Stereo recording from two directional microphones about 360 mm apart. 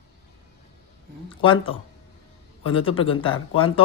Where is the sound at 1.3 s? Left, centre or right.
Centre.